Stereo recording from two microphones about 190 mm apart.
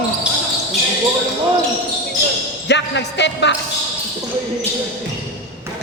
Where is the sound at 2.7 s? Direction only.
65° left (ahead or behind).